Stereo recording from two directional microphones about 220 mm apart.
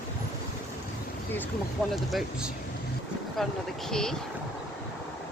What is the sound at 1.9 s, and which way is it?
Speech, centre (ahead or behind).